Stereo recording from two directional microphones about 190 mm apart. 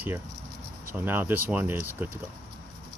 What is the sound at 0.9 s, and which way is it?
Speech, 10° right (ahead or behind).